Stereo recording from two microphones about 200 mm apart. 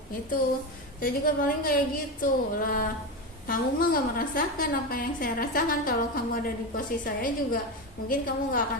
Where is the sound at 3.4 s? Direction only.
45° left (ahead or behind).